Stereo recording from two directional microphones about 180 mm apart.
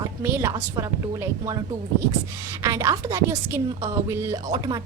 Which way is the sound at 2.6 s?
20° right (ahead or behind).